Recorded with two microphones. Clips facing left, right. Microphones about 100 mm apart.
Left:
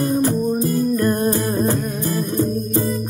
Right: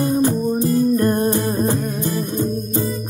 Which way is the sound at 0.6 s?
30° right (ahead or behind).